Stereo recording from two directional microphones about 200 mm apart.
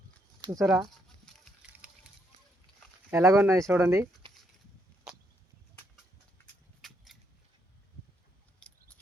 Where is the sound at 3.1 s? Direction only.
15° right (ahead or behind).